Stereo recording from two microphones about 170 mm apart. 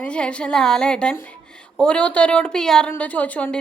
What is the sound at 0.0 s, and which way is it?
A woman's voice, 5° left (ahead or behind).